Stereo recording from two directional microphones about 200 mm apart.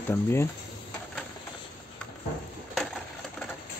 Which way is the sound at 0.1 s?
15° left (ahead or behind).